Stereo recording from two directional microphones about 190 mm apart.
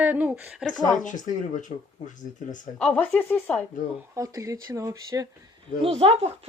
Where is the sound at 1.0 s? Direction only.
40° left (ahead or behind).